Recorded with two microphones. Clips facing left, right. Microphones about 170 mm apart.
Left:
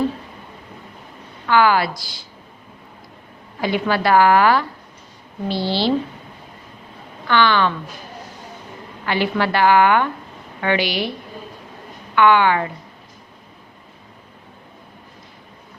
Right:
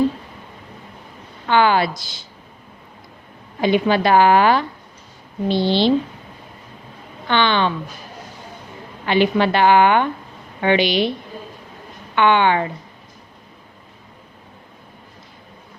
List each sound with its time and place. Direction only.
1.5 s a woman's voice: 25° right (ahead or behind)
3.6 s a woman's voice: 20° right (ahead or behind)
7.3 s a woman's voice: 20° right (ahead or behind)
9.0 s a woman's voice: 20° right (ahead or behind)
12.1 s a woman's voice: 25° right (ahead or behind)